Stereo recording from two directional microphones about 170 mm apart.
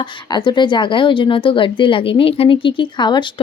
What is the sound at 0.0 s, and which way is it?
Speech, 25° left (ahead or behind).